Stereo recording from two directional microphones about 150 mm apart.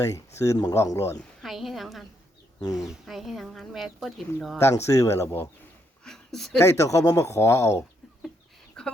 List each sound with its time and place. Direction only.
0.3 s speech: 20° left (ahead or behind)
1.4 s a woman's voice: centre (ahead or behind)
4.5 s speech: 20° left (ahead or behind)
6.1 s a sound: centre (ahead or behind)
6.6 s speech: 20° left (ahead or behind)
8.8 s a sound: 5° left (ahead or behind)